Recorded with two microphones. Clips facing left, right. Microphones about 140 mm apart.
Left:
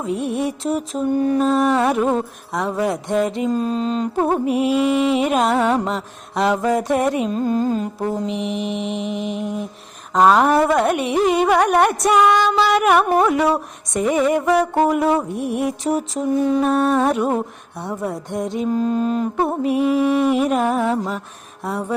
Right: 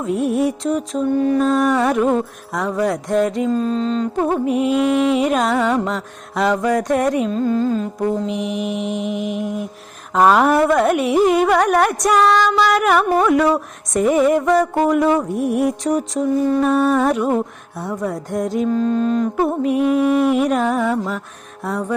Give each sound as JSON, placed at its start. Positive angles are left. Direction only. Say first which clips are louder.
{"t": 0.0, "sound": "music", "louder": "right 4 dB", "side_deg": 0}
{"t": 3.3, "sound": "mantra", "louder": "right 2 dB", "side_deg": 10}
{"t": 4.5, "sound": "music", "louder": "right 2 dB", "side_deg": 5}
{"t": 5.6, "sound": "music", "louder": "even", "side_deg": 25}
{"t": 5.9, "sound": "music", "louder": "even", "side_deg": 0}
{"t": 7.3, "sound": "mantra", "louder": "right 1 dB", "side_deg": 15}
{"t": 8.0, "sound": "music", "louder": "right 4 dB", "side_deg": 0}
{"t": 12.2, "sound": "mantra", "louder": "right 2 dB", "side_deg": 20}
{"t": 13.9, "sound": "music", "louder": "right 3 dB", "side_deg": 0}
{"t": 18.7, "sound": "mantra", "louder": "even", "side_deg": 10}
{"t": 19.6, "sound": "music", "louder": "right 1 dB", "side_deg": 0}
{"t": 20.8, "sound": "music", "louder": "right 1 dB", "side_deg": 25}
{"t": 21.6, "sound": "music", "louder": "right 2 dB", "side_deg": 0}